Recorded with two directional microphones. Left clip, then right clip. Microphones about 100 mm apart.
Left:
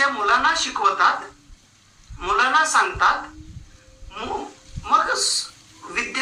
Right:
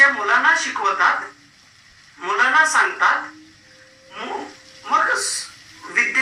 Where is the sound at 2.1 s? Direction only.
25° left (ahead or behind).